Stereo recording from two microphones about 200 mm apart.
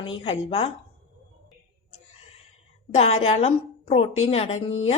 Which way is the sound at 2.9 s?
30° left (ahead or behind).